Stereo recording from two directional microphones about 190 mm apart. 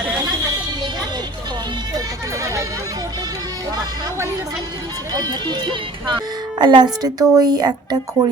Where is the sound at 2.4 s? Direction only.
15° right (ahead or behind).